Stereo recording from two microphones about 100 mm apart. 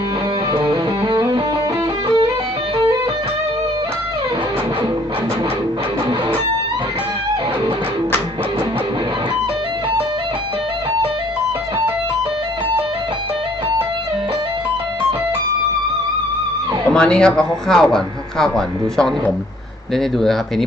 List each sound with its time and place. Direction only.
0.5 s music: 45° right (ahead or behind)
16.9 s speech: 10° left (ahead or behind)